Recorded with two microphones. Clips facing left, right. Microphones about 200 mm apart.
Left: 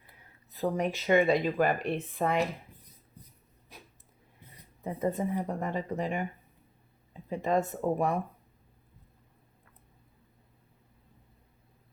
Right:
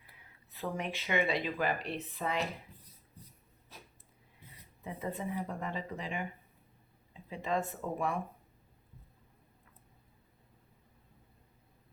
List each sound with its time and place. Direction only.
0.5 s a woman's voice: 40° left (ahead or behind)
4.8 s a woman's voice: 40° left (ahead or behind)